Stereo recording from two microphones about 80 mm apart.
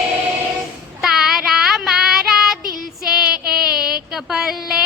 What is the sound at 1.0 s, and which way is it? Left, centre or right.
Child singing, centre.